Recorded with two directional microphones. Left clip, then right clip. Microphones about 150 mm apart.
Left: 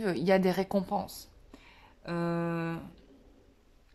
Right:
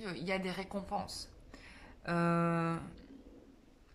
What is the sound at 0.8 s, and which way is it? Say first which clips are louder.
Speech: left 5 dB; 25° left (ahead or behind).